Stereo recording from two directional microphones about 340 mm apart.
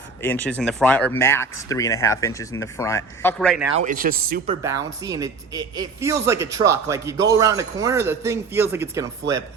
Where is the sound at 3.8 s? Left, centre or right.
Right.